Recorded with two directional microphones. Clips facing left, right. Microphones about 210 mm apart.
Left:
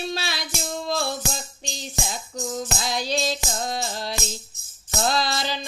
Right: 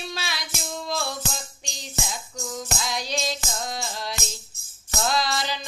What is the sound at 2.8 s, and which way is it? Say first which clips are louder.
Music: left 3 dB; 30° left (ahead or behind).